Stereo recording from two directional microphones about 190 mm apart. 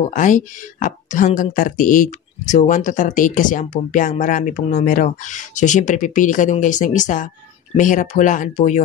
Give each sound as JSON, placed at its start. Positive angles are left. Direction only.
{"t": 0.1, "sound": "speech", "side_deg": 40}